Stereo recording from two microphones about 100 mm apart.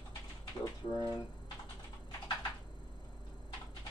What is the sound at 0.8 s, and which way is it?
Speech, 40° left (ahead or behind).